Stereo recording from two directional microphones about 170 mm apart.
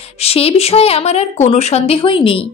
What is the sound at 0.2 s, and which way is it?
A woman's voice, 35° left (ahead or behind).